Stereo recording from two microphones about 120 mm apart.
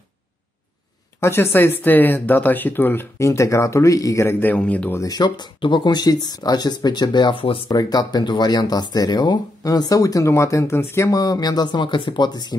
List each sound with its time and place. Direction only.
1.2 s speech: 20° left (ahead or behind)
5.0 s speech: 35° left (ahead or behind)
7.7 s speech: 35° left (ahead or behind)